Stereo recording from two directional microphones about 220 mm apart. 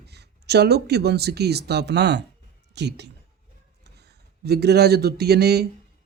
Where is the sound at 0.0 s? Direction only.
50° right (ahead or behind).